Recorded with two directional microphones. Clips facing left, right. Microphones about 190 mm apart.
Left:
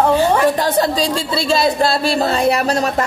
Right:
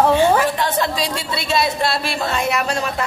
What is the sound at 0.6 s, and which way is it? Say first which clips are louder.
Speech: left 4 dB; 35° left (ahead or behind).